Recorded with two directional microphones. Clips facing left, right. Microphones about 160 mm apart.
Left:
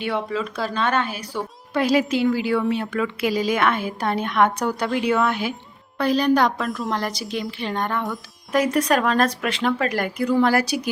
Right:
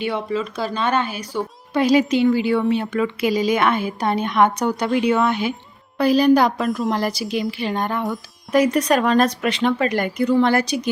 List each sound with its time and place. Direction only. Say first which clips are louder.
0.0 s a woman's voice: right 2 dB; centre (ahead or behind)
6.6 s a woman's voice: right 5 dB; 20° right (ahead or behind)
7.0 s a woman's voice: right 4 dB; 5° right (ahead or behind)